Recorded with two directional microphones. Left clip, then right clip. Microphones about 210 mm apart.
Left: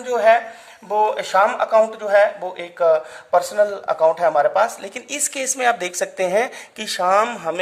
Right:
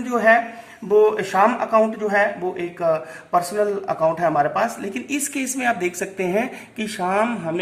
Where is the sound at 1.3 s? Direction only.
50° left (ahead or behind).